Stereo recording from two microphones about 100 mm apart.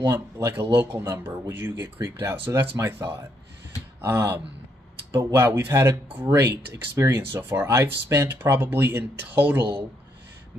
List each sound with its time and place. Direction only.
0.0 s speech: 25° right (ahead or behind)
6.2 s speech: 30° right (ahead or behind)